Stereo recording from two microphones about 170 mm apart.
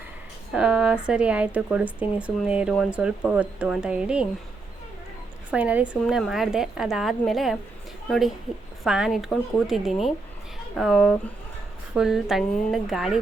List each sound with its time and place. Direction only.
0.5 s speech: 5° right (ahead or behind)
5.5 s a woman's voice: 10° right (ahead or behind)